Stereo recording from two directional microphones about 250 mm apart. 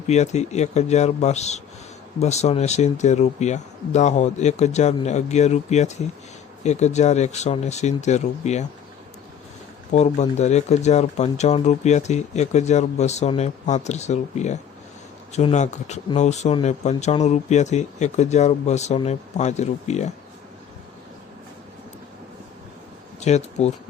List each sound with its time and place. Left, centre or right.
0.1 s speech: left
9.9 s speech: left
23.2 s speech: left